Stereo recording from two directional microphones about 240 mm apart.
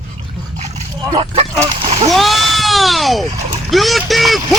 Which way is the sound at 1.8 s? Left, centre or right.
Right.